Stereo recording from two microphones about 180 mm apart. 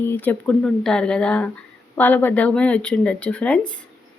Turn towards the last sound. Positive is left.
turn(degrees=5)  # may be behind; listen again after turning